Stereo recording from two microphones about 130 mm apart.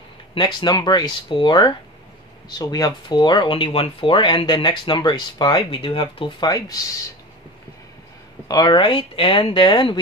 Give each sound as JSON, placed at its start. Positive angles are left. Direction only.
{"t": 0.3, "sound": "speech", "side_deg": 35}
{"t": 8.5, "sound": "speech", "side_deg": 35}